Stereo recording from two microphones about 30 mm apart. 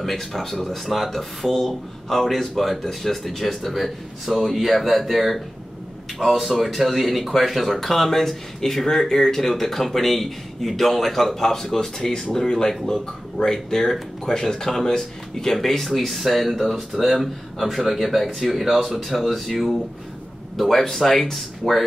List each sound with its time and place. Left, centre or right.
0.0 s speech: centre
7.8 s speech: centre
12.4 s a man's voice: left; by 21.8 s centre